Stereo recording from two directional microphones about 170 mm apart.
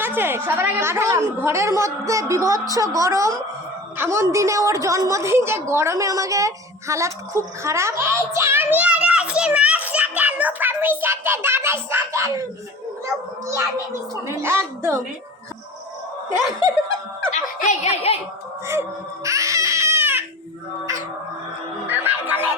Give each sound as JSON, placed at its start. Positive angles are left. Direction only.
{"t": 0.0, "sound": "a woman's voice", "side_deg": -10}
{"t": 14.3, "sound": "a woman's voice", "side_deg": -15}
{"t": 17.3, "sound": "speech", "side_deg": 45}
{"t": 18.7, "sound": "baby cry", "side_deg": -15}
{"t": 21.8, "sound": "music", "side_deg": -10}